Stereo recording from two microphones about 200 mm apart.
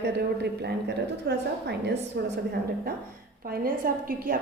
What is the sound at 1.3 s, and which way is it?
A woman's voice, 55° right (ahead or behind).